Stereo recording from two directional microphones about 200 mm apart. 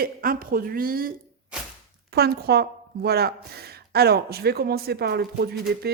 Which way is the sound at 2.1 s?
50° right (ahead or behind).